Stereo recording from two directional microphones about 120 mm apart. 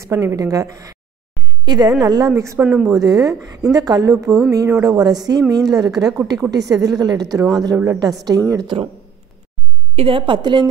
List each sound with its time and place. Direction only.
0.0 s a woman's voice: 25° right (ahead or behind)
2.6 s speech: 10° right (ahead or behind)
2.9 s a woman's voice: 30° right (ahead or behind)
9.9 s a woman's voice: 45° right (ahead or behind)